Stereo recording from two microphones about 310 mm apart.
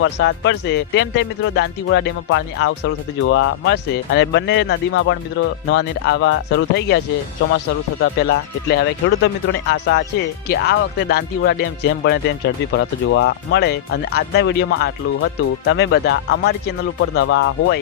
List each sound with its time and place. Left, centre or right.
0.0 s speech: left
8.0 s speech: left